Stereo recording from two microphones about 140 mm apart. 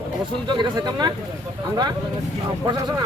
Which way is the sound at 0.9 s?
30° right (ahead or behind).